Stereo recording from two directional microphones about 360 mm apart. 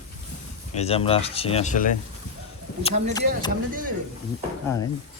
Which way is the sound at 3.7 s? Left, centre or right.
Right.